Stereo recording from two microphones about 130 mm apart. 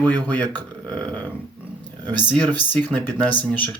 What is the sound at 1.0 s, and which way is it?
Speech, 10° left (ahead or behind).